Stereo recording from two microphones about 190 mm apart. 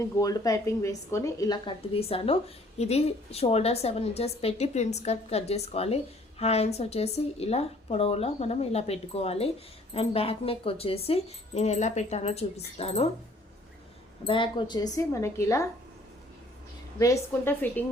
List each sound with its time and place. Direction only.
0.0 s a woman's voice: 20° left (ahead or behind)
14.3 s a woman's voice: 25° left (ahead or behind)
17.0 s a woman's voice: 15° left (ahead or behind)